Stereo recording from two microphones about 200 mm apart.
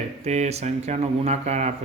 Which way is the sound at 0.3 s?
35° right (ahead or behind).